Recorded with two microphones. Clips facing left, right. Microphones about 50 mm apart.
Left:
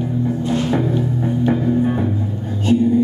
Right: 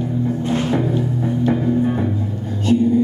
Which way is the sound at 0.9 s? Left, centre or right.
Centre.